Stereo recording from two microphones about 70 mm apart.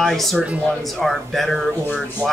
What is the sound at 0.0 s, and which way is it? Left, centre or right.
Speech, centre.